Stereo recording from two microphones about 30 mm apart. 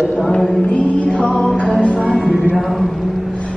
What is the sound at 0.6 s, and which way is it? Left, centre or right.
Music, left.